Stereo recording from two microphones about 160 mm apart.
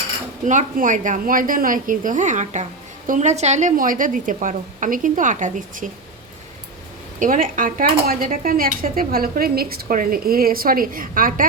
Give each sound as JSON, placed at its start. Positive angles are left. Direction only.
{"t": 0.4, "sound": "speech", "side_deg": -55}
{"t": 7.2, "sound": "speech", "side_deg": -60}